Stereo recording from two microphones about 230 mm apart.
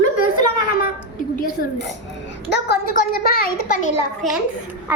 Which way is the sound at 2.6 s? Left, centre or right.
Left.